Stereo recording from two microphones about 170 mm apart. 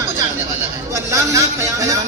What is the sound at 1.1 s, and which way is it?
Speech, 20° right (ahead or behind).